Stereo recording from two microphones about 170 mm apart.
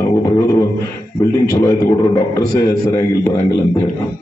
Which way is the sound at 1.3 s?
20° left (ahead or behind).